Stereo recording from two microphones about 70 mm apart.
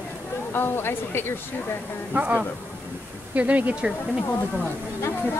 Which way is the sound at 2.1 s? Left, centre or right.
Right.